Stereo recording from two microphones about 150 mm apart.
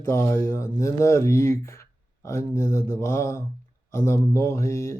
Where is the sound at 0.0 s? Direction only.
15° left (ahead or behind).